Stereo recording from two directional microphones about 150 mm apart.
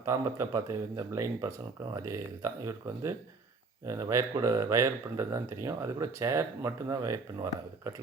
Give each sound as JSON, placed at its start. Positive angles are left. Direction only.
{"t": 0.0, "sound": "speech", "side_deg": -20}